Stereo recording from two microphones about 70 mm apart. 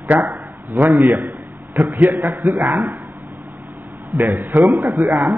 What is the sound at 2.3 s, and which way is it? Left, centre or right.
Speech, right.